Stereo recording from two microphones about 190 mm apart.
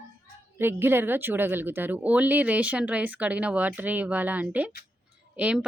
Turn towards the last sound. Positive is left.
turn(degrees=-5)  # may be behind; listen again after turning